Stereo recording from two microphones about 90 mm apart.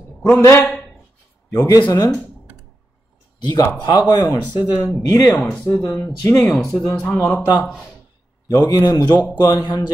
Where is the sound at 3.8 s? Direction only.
55° left (ahead or behind).